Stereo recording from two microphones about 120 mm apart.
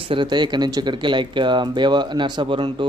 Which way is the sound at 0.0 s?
45° right (ahead or behind).